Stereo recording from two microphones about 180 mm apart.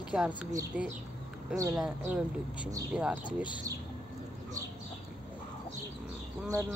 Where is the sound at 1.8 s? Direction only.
5° right (ahead or behind).